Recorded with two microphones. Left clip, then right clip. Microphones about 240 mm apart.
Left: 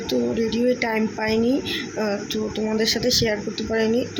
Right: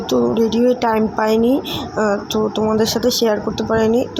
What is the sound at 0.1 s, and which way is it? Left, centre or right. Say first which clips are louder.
Speech: right 7 dB; centre.